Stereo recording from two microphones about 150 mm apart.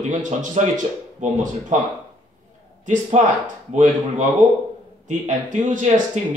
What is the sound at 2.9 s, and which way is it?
Speech, 55° right (ahead or behind).